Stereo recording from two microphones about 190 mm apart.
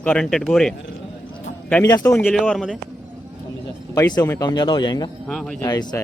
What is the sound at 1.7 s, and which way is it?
Speech, 15° left (ahead or behind).